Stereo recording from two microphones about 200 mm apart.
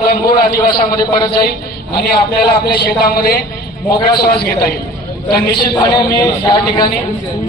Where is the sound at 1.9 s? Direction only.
50° left (ahead or behind).